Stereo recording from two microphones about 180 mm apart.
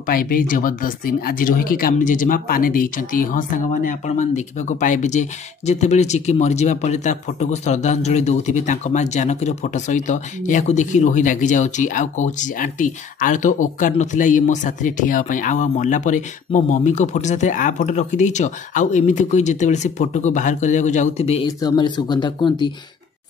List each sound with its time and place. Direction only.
0.0 s speech: 50° left (ahead or behind); by 21.5 s 35° left (ahead or behind)
21.5 s speech: 20° left (ahead or behind)